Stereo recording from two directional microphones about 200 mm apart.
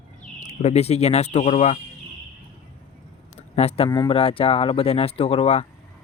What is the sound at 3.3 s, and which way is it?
Speech, 30° left (ahead or behind).